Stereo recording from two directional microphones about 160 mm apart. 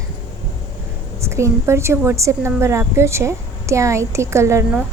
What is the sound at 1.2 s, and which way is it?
A woman's voice, 15° right (ahead or behind).